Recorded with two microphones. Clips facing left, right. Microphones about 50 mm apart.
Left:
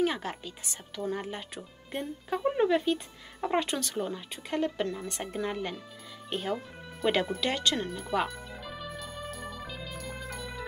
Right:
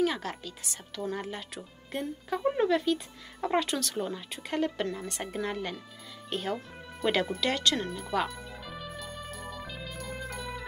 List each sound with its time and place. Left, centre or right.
0.0 s a woman's voice: centre
2.7 s speech: centre
3.9 s speech: centre
7.4 s speech: centre
7.8 s music: centre